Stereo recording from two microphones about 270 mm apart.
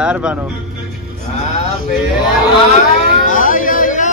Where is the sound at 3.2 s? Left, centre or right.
Left.